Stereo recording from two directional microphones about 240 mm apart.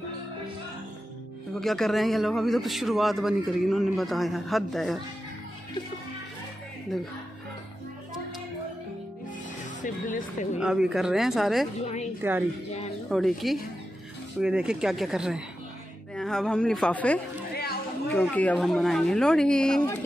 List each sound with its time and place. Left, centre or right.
1.5 s a man's voice: centre
9.8 s speech: left
10.6 s a man's voice: centre
17.6 s a sound: left
18.1 s a man's voice: centre